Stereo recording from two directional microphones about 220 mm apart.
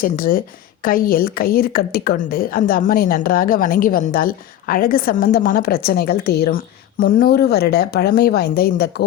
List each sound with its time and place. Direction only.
0.0 s a woman's voice: 40° left (ahead or behind)